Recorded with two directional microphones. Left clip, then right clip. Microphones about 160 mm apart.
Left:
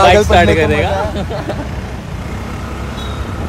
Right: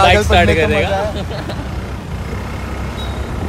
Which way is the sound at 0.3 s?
40° left (ahead or behind).